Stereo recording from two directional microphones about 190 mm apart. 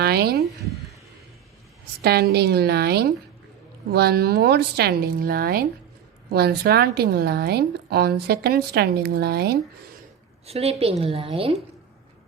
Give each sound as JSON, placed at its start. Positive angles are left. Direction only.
{"t": 0.0, "sound": "speech", "side_deg": -55}
{"t": 2.0, "sound": "a woman's voice", "side_deg": -55}
{"t": 10.4, "sound": "a woman's voice", "side_deg": -35}